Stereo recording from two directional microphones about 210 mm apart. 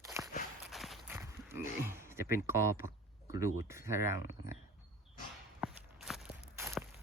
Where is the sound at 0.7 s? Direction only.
Centre (ahead or behind).